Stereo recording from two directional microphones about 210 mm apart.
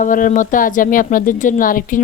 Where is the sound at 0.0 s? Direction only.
40° left (ahead or behind).